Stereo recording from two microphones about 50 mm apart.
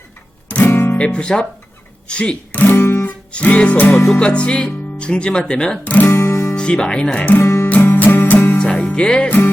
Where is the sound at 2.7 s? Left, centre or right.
Left.